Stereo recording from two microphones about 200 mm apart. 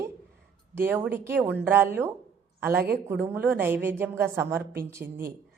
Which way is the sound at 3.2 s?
10° right (ahead or behind).